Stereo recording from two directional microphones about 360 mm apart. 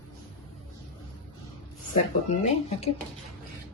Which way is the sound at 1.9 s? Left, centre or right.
Centre.